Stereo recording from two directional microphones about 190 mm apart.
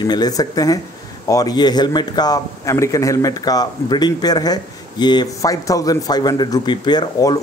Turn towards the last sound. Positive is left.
turn(degrees=20)  # may be behind; listen again after turning